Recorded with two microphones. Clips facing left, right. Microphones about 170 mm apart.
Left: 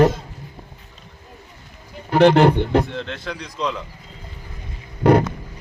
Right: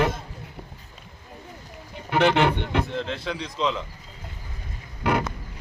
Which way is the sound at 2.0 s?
40° left (ahead or behind).